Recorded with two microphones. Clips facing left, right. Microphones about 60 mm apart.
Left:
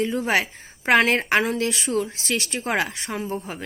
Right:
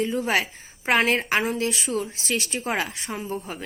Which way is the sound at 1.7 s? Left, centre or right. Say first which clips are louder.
Left 3 dB; left.